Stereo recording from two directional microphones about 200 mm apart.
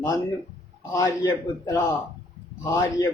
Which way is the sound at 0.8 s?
15° left (ahead or behind).